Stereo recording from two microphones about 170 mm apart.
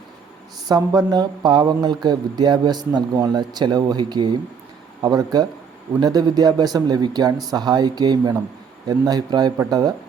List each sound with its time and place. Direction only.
0.7 s speech: 25° right (ahead or behind)